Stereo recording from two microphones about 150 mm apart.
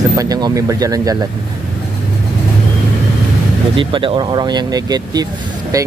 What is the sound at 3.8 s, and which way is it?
Speech, 35° right (ahead or behind).